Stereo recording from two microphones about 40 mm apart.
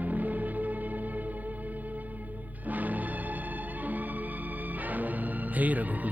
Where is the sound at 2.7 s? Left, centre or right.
Right.